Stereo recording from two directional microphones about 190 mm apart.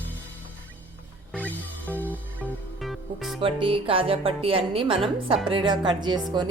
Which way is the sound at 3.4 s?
30° right (ahead or behind).